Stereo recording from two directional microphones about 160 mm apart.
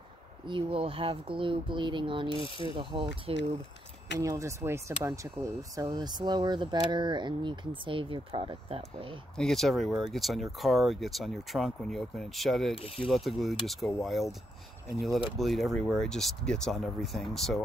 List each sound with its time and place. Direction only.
0.5 s speech: 30° right (ahead or behind)
2.4 s speech: 35° left (ahead or behind)
2.8 s speech: 30° right (ahead or behind)
4.2 s speech: 20° right (ahead or behind); by 9.1 s 35° right (ahead or behind)
9.4 s speech: centre (ahead or behind)
12.7 s speech: 35° left (ahead or behind)
13.0 s speech: centre (ahead or behind)
15.3 s speech: centre (ahead or behind)